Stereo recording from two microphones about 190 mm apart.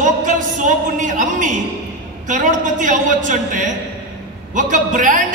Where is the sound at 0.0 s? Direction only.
40° right (ahead or behind).